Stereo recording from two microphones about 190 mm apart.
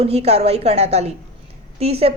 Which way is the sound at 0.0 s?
35° right (ahead or behind).